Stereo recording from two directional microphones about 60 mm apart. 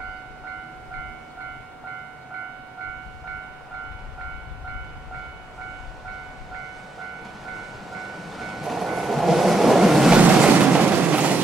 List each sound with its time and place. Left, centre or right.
7.5 s train: centre
10.1 s train: right